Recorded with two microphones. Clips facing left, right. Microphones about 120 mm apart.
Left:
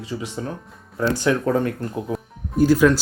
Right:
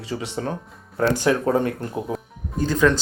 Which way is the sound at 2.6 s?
10° left (ahead or behind).